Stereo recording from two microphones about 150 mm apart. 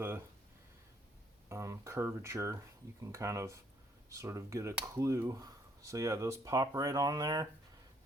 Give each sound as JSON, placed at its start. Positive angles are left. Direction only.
{"t": 1.5, "sound": "speech", "side_deg": -20}